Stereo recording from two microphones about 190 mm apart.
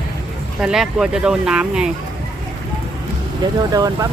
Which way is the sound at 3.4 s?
20° right (ahead or behind).